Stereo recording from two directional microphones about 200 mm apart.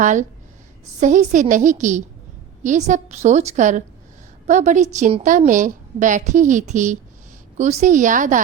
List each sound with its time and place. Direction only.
0.0 s a woman's voice: 40° right (ahead or behind)